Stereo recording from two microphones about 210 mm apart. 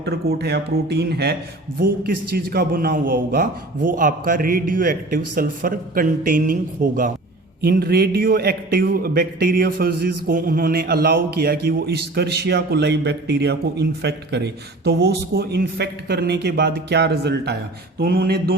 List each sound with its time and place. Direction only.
0.0 s a man's voice: 50° right (ahead or behind)